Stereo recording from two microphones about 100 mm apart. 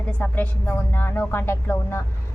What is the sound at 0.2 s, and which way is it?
A woman's voice, 15° left (ahead or behind).